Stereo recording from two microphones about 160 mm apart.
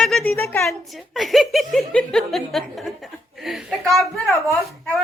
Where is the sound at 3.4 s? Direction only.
Centre (ahead or behind).